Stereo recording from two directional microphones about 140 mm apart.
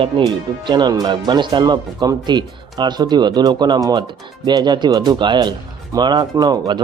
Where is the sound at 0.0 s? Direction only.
35° right (ahead or behind).